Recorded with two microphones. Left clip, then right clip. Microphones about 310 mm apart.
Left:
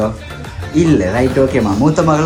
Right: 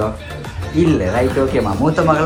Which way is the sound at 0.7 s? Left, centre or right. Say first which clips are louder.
Left 3 dB; left.